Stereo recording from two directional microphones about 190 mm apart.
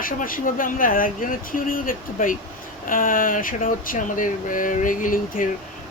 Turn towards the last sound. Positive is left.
turn(degrees=45)  # may be behind; listen again after turning